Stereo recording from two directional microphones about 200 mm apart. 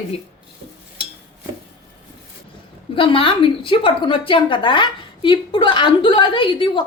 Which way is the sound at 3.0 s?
25° left (ahead or behind).